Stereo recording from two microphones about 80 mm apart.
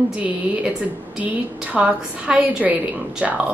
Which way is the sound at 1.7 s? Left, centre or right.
Centre.